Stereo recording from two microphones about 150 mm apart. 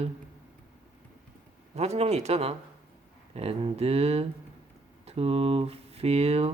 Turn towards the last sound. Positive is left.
turn(degrees=-45)  # may be behind; listen again after turning